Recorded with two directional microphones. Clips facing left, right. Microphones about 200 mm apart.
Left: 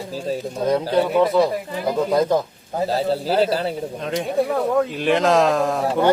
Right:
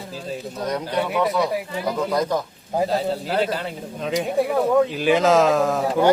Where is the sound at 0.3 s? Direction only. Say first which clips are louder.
Left 6 dB; 25° left (ahead or behind).